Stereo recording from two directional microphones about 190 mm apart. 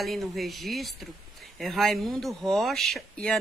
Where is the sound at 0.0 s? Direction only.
Centre (ahead or behind).